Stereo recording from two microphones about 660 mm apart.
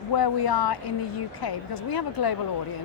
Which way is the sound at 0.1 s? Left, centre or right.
Left.